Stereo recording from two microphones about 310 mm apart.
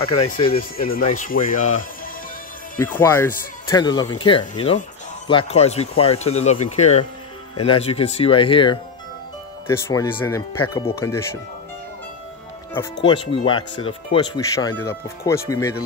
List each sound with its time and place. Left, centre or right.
0.0 s speech: centre
3.0 s speech: centre
13.0 s speech: centre